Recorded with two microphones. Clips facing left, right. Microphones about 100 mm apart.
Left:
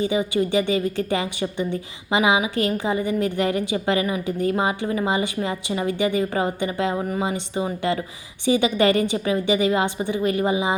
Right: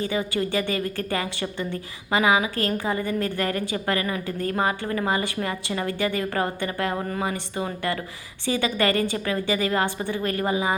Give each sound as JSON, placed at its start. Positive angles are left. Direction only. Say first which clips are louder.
{"t": 0.0, "sound": "a woman's voice", "louder": "left 4 dB", "side_deg": 15}